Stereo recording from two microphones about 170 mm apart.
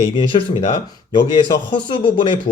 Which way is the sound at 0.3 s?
30° left (ahead or behind).